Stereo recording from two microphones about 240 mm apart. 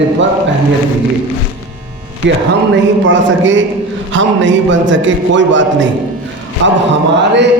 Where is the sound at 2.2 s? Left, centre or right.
Right.